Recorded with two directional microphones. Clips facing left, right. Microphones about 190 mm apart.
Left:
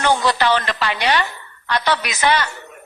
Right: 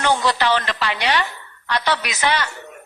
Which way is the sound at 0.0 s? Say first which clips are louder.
Left 2 dB; 50° left (ahead or behind).